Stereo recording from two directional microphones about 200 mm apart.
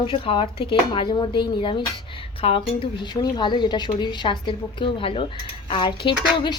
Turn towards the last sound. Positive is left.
turn(degrees=25)  # may be behind; listen again after turning